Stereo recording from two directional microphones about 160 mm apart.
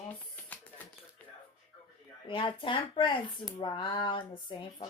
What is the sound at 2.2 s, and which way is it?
Speech, 30° left (ahead or behind).